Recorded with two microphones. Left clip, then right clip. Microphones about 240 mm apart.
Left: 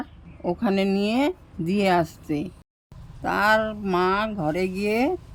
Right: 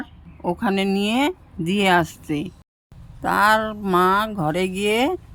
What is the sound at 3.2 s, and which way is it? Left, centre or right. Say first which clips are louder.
Speech: right 3 dB; centre.